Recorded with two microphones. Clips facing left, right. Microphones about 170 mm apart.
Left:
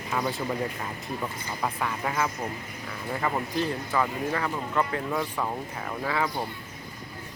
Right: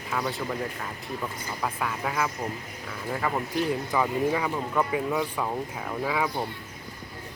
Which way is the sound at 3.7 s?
10° right (ahead or behind).